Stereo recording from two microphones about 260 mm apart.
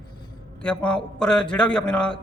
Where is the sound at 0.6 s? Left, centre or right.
Centre.